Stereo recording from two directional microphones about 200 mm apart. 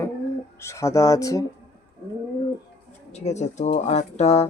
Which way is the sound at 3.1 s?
35° left (ahead or behind).